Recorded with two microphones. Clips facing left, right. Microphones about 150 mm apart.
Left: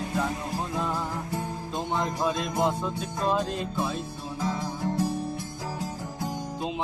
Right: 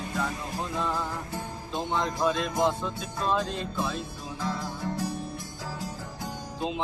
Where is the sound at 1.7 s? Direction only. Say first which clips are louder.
Even; 10° left (ahead or behind).